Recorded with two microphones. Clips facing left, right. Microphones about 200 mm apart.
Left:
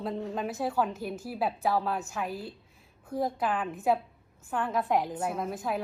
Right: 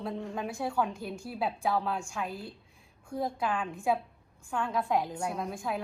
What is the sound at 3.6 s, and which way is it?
A woman's voice, 5° left (ahead or behind).